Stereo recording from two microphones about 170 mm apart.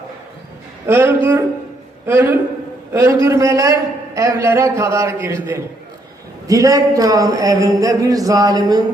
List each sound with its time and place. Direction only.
0.9 s a man's voice: 15° right (ahead or behind)